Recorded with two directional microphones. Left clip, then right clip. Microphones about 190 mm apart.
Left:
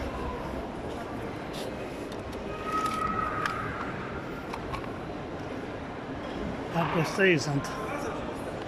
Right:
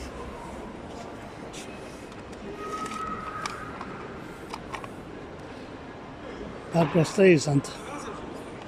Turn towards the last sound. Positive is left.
turn(degrees=-20)  # may be behind; listen again after turning